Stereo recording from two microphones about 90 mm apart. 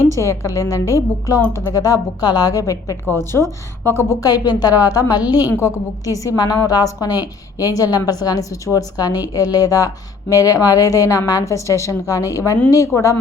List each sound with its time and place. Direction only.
0.2 s a woman's voice: 35° left (ahead or behind)
4.2 s a woman's voice: 45° left (ahead or behind)
5.5 s a woman's voice: 35° left (ahead or behind)